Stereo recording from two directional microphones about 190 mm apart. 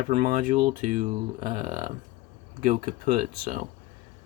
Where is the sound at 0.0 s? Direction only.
40° right (ahead or behind).